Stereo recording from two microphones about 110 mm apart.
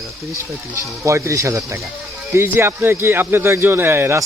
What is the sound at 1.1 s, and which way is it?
A man's voice, 25° right (ahead or behind).